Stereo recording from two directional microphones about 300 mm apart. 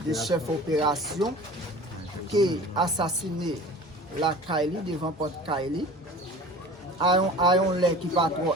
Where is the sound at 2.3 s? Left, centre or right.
Centre.